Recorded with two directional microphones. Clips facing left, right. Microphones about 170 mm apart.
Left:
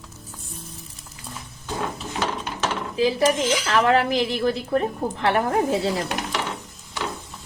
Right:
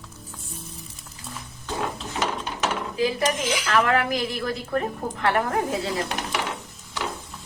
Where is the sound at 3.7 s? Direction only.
25° left (ahead or behind).